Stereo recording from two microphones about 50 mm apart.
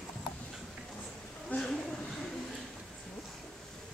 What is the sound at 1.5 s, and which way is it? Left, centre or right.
Speech, left.